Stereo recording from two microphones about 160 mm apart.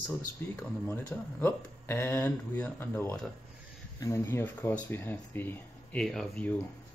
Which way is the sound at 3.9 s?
20° left (ahead or behind).